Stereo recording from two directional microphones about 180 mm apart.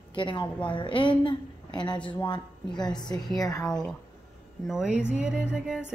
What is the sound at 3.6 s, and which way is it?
A woman's voice, 5° left (ahead or behind).